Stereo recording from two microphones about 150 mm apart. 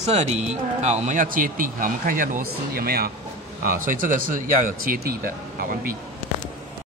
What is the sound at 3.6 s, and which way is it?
Speech, 65° right (ahead or behind).